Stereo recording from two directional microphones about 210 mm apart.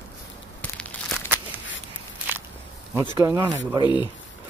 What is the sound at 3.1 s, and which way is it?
Speech, 15° right (ahead or behind).